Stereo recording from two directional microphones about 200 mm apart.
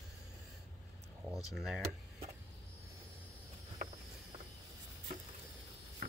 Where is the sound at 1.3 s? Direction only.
Centre (ahead or behind).